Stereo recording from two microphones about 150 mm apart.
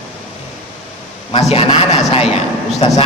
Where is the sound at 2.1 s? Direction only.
40° left (ahead or behind).